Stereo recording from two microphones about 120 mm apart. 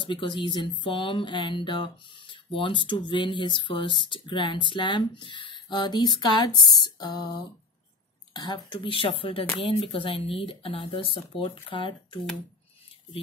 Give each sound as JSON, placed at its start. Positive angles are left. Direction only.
{"t": 0.0, "sound": "speech", "side_deg": 40}